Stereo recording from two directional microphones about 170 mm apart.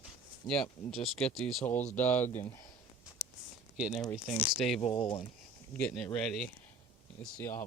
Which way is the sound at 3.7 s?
5° right (ahead or behind).